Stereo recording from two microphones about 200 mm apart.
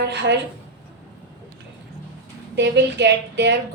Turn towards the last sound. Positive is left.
turn(degrees=-55)  # may be behind; listen again after turning